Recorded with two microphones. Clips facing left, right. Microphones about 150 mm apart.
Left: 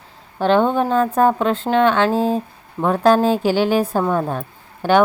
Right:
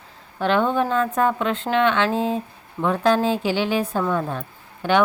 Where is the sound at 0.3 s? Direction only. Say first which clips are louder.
Left 4 dB; 30° left (ahead or behind).